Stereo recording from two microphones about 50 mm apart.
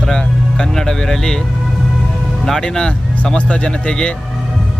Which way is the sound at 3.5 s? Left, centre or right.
Left.